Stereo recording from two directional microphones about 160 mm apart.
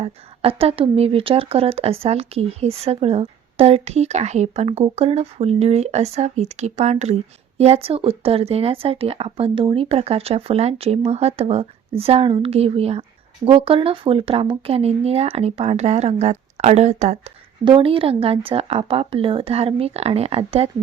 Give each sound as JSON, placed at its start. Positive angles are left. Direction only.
{"t": 0.0, "sound": "speech", "side_deg": -35}
{"t": 17.7, "sound": "speech", "side_deg": -35}